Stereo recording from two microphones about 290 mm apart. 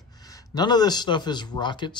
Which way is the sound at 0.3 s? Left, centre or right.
Centre.